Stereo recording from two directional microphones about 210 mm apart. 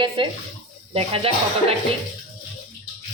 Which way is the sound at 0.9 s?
30° right (ahead or behind).